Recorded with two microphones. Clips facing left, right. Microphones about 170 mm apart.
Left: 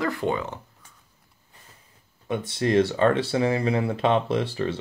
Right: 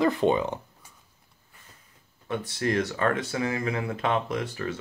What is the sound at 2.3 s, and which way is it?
Speech, 25° left (ahead or behind).